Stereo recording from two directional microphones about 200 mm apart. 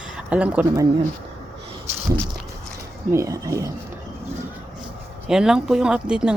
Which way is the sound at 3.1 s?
15° right (ahead or behind).